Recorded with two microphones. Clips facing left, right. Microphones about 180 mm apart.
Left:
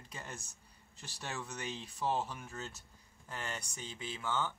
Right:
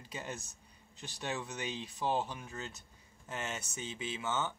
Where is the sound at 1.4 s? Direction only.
20° right (ahead or behind).